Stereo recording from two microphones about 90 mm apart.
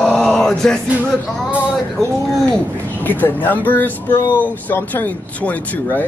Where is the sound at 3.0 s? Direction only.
20° left (ahead or behind).